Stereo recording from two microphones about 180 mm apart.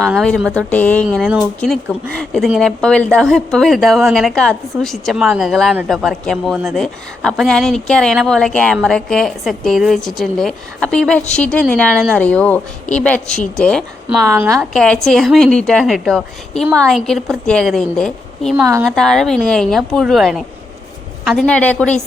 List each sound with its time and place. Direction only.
0.0 s a woman's voice: centre (ahead or behind)
14.1 s a woman's voice: 10° right (ahead or behind)
14.5 s speech: centre (ahead or behind)
18.6 s a woman's voice: 15° right (ahead or behind)
18.9 s a woman's voice: centre (ahead or behind)